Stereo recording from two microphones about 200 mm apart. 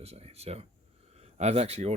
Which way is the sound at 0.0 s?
30° right (ahead or behind).